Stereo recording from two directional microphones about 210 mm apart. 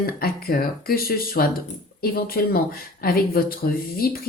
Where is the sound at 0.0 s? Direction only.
45° left (ahead or behind).